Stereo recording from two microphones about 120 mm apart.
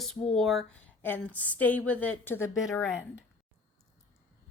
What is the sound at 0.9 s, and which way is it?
A woman's voice, 15° left (ahead or behind).